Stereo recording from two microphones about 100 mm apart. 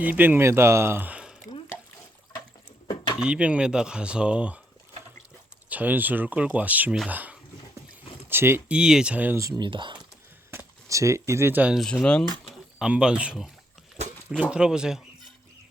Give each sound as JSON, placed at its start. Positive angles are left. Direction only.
{"t": 0.0, "sound": "speech", "side_deg": -20}
{"t": 3.2, "sound": "speech", "side_deg": -10}
{"t": 5.6, "sound": "speech", "side_deg": -15}
{"t": 8.7, "sound": "speech", "side_deg": -10}
{"t": 9.6, "sound": "speech", "side_deg": -55}
{"t": 10.8, "sound": "speech", "side_deg": -30}
{"t": 11.7, "sound": "speech", "side_deg": 0}
{"t": 12.5, "sound": "a sound", "side_deg": -10}
{"t": 14.5, "sound": "speech", "side_deg": -10}